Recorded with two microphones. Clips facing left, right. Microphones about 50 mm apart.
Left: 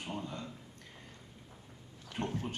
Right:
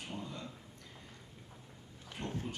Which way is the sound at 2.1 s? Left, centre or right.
Left.